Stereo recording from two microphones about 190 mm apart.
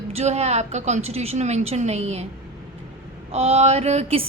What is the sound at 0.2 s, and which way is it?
Music, 35° right (ahead or behind).